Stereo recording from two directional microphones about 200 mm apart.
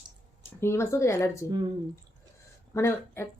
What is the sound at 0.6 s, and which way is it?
Speech, 15° left (ahead or behind).